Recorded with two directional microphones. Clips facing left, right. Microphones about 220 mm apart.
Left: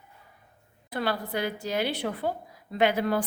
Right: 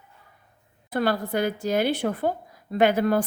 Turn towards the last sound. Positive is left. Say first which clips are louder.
# right 4 dB
turn(degrees=-45)  # may be behind; listen again after turning